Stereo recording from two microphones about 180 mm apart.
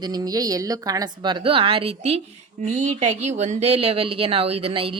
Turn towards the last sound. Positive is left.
turn(degrees=-30)  # may be behind; listen again after turning